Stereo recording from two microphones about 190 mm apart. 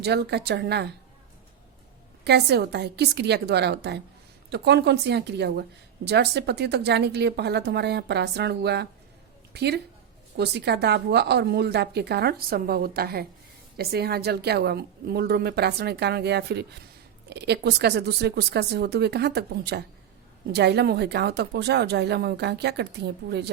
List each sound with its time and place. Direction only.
0.0 s a woman's voice: 60° right (ahead or behind)
2.2 s a woman's voice: 60° right (ahead or behind)